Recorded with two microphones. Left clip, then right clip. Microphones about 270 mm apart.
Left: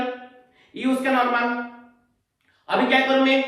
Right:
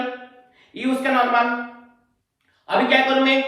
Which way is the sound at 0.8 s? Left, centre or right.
Centre.